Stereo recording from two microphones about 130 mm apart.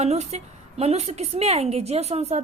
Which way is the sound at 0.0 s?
60° right (ahead or behind).